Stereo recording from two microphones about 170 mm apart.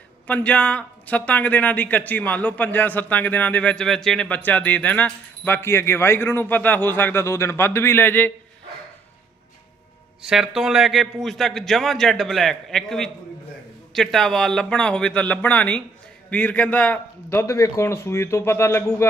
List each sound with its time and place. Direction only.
0.3 s speech: 10° left (ahead or behind)
10.2 s a man's voice: centre (ahead or behind); by 19.0 s 15° left (ahead or behind)